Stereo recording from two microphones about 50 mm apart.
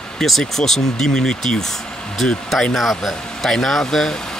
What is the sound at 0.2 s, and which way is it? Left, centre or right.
Speech, centre.